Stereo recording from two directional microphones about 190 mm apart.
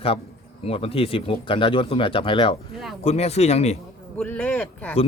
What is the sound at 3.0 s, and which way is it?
Speech, 35° left (ahead or behind).